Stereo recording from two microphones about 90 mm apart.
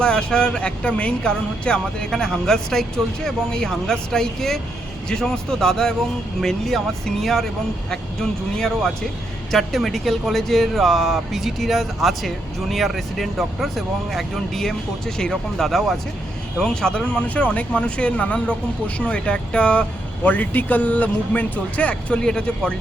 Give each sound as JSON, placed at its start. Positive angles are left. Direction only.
{"t": 0.0, "sound": "speech", "side_deg": 10}